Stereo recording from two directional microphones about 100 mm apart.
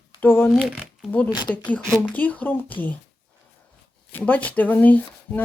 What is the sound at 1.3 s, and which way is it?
Speech, 50° left (ahead or behind).